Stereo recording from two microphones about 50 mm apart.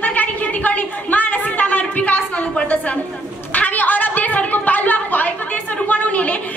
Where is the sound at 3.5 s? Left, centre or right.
Left.